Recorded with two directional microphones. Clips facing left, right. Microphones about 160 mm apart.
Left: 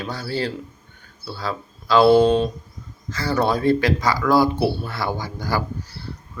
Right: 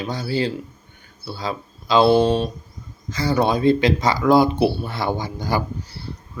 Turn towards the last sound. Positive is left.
turn(degrees=-20)  # may be behind; listen again after turning